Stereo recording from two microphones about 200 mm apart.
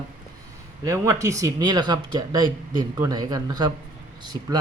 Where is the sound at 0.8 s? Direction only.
15° right (ahead or behind).